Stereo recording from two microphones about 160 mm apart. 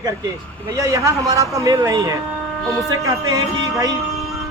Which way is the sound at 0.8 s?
20° right (ahead or behind).